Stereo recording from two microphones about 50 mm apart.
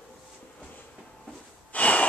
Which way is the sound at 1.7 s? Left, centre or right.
Left.